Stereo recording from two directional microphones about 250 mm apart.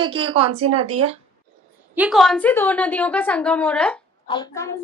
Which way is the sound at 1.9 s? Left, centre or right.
Centre.